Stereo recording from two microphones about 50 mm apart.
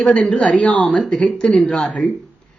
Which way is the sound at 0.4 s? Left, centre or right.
Left.